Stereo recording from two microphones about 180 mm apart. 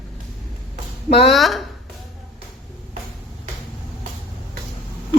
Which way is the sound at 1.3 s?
Centre (ahead or behind).